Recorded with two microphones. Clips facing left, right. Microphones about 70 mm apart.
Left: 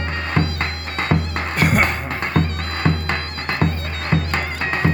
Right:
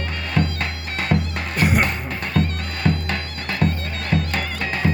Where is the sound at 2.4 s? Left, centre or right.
Left.